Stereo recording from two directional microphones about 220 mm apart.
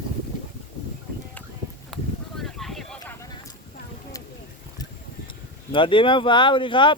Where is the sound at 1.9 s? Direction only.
Centre (ahead or behind).